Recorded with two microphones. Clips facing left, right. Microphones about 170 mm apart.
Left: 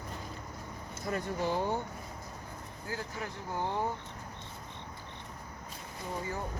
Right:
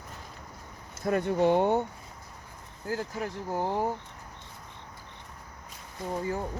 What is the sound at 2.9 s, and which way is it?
Speech, 40° right (ahead or behind).